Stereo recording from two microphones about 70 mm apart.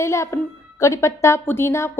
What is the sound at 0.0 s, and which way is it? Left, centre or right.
A woman's voice, left.